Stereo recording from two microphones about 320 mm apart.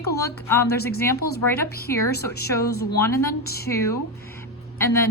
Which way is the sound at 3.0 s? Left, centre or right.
Centre.